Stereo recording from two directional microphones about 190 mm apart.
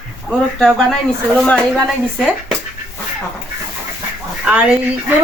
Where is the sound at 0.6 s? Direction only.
5° left (ahead or behind).